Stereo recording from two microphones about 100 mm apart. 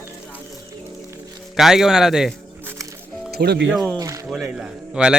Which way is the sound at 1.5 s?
5° right (ahead or behind).